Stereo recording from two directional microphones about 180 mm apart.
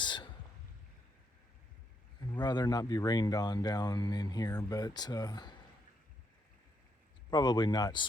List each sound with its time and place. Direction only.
0.0 s a sound: 25° left (ahead or behind)
2.3 s speech: 25° left (ahead or behind)
7.3 s speech: 25° left (ahead or behind)